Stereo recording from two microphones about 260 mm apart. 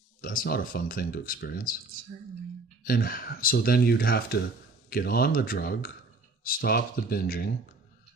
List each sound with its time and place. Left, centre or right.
0.2 s speech: left
2.8 s speech: left